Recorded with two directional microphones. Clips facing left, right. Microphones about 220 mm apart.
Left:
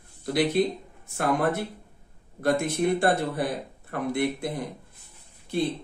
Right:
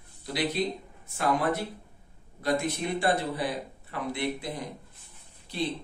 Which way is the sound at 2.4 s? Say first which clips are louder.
Left 4 dB; 55° left (ahead or behind).